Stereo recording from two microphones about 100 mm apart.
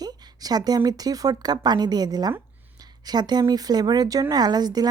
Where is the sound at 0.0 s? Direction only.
40° right (ahead or behind).